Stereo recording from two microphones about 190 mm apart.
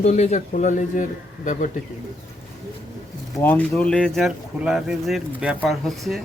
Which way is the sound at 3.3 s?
10° left (ahead or behind).